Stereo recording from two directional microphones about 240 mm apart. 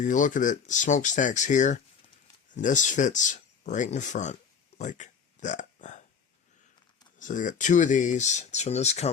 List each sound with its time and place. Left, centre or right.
0.0 s speech: left
4.8 s hiccup: left
7.2 s speech: left